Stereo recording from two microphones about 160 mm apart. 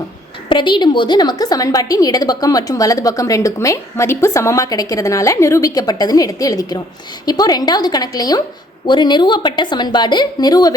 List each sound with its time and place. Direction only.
0.4 s a woman's voice: 30° left (ahead or behind)